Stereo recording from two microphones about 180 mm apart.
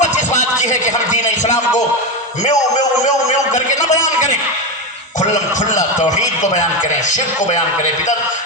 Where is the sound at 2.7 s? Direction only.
40° left (ahead or behind).